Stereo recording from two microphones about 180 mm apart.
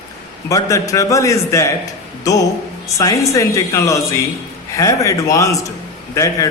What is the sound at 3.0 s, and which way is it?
A man's voice, 20° left (ahead or behind).